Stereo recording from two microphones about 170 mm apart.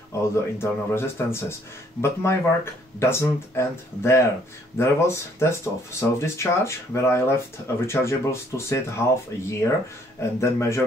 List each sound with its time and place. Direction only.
0.2 s speech: 15° left (ahead or behind)